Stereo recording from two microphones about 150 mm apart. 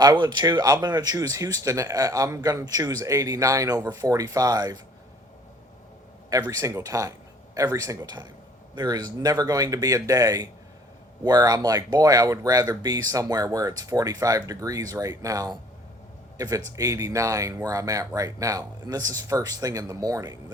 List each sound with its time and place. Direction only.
0.0 s speech: 25° right (ahead or behind)
6.5 s speech: 20° right (ahead or behind)